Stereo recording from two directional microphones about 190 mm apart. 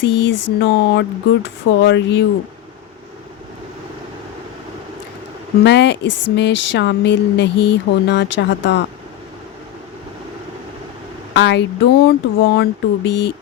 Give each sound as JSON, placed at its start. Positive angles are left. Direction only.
{"t": 0.0, "sound": "speech", "side_deg": 70}
{"t": 5.6, "sound": "speech", "side_deg": 65}
{"t": 11.3, "sound": "speech", "side_deg": 65}